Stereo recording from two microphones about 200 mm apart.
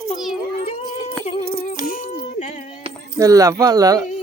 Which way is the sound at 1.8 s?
40° left (ahead or behind).